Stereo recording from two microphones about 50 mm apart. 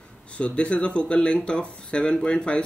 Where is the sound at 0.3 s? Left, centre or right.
Left.